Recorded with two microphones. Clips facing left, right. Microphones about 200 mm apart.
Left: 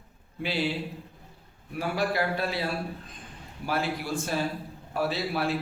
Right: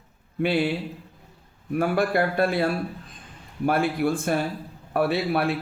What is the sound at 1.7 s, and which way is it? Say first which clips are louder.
Speech: right 6 dB; 55° right (ahead or behind).